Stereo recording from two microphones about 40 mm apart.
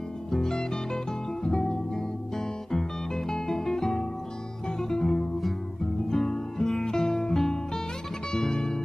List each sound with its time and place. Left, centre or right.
0.3 s music: centre